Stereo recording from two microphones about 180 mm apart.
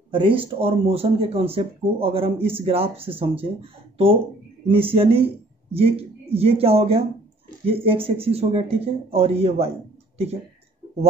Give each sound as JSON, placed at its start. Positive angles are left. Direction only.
{"t": 0.1, "sound": "speech", "side_deg": -30}
{"t": 4.6, "sound": "speech", "side_deg": -30}